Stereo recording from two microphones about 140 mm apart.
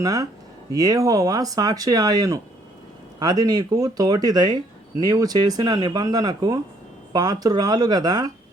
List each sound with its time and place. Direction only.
0.0 s speech: 25° right (ahead or behind)